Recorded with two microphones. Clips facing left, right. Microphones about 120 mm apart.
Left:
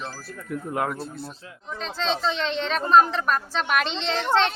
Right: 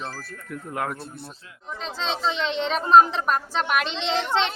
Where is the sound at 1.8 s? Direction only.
10° right (ahead or behind).